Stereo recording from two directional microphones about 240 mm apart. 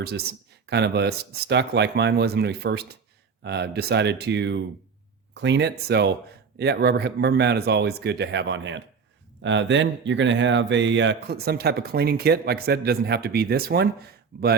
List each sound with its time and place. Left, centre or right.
0.0 s speech: right